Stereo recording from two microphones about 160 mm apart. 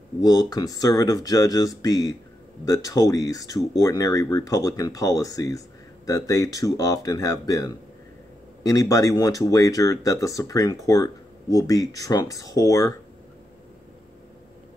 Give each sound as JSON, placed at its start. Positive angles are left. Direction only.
{"t": 0.5, "sound": "speech", "side_deg": 25}